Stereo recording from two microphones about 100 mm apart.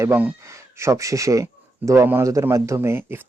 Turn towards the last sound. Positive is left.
turn(degrees=-25)  # may be behind; listen again after turning